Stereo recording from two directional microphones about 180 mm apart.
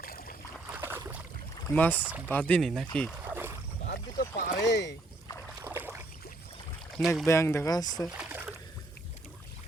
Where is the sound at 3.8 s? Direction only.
60° left (ahead or behind).